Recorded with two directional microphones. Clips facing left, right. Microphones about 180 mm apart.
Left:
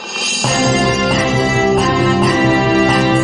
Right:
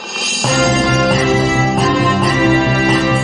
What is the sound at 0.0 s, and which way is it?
Music, centre (ahead or behind).